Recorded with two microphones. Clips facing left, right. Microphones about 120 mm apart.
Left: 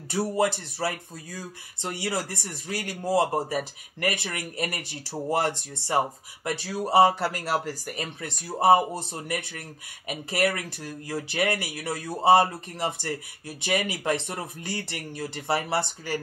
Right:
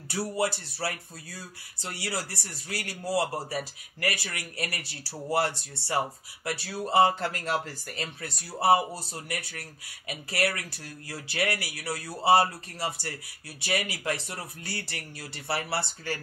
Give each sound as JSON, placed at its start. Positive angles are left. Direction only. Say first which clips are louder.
{"t": 0.5, "sound": "speech", "louder": "left 4 dB", "side_deg": 20}